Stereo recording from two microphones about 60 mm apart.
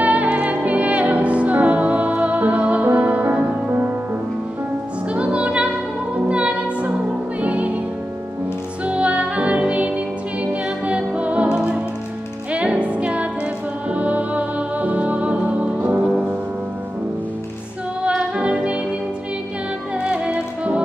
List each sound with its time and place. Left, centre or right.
0.0 s music: right
5.1 s music: centre
8.8 s music: right
18.0 s music: centre
20.0 s music: centre